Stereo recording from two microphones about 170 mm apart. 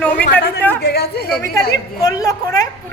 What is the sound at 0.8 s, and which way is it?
Speech, 70° left (ahead or behind).